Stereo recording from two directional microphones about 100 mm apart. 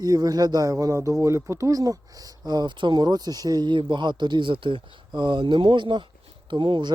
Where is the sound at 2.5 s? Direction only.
45° right (ahead or behind).